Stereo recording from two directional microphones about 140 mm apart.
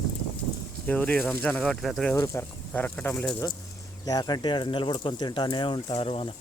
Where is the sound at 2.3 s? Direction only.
20° left (ahead or behind).